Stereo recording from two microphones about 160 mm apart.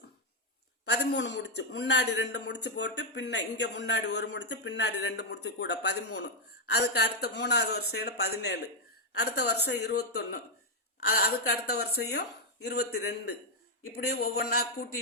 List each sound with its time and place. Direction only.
0.9 s a man's voice: 90° left
11.9 s a man's voice: 85° left
13.9 s a man's voice: 75° left (ahead or behind)